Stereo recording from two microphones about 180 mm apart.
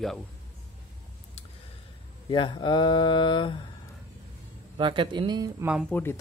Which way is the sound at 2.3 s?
25° left (ahead or behind).